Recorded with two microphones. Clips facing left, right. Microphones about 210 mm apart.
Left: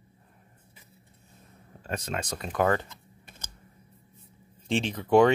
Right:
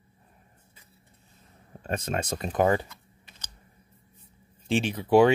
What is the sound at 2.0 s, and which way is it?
Speech, 25° right (ahead or behind).